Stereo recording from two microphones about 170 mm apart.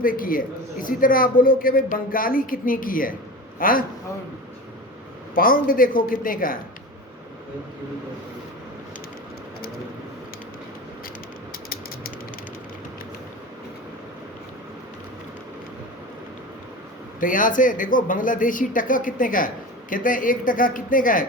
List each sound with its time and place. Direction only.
0.0 s a man's voice: 55° left (ahead or behind)
5.3 s a man's voice: 55° left (ahead or behind)
17.2 s speech: 50° left (ahead or behind)